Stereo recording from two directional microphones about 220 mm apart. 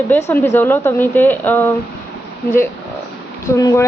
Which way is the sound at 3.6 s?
15° left (ahead or behind).